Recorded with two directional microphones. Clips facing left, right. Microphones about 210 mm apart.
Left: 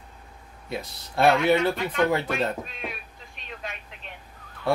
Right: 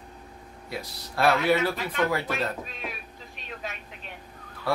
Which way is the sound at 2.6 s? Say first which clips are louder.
Left 1 dB; centre (ahead or behind).